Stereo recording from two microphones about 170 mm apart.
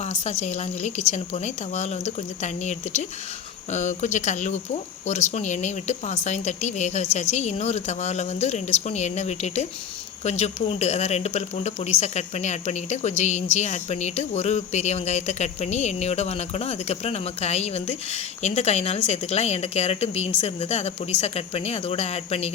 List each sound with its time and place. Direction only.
0.0 s speech: 40° left (ahead or behind)